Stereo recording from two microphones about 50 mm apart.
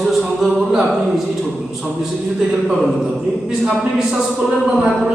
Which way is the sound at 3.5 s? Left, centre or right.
Centre.